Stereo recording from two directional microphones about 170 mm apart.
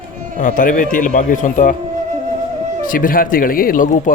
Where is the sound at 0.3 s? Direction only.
50° left (ahead or behind).